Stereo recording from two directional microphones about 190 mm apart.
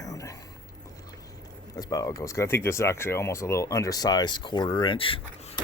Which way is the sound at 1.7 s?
20° left (ahead or behind).